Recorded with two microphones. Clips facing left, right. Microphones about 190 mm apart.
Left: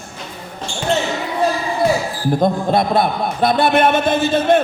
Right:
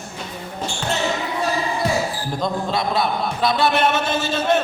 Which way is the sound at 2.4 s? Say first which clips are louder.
Left 6 dB; 55° left (ahead or behind).